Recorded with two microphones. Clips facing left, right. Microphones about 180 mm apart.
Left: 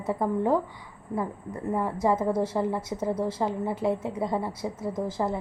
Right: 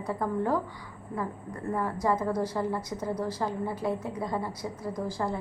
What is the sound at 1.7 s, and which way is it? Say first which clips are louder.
A woman's voice: left 3 dB; 20° left (ahead or behind).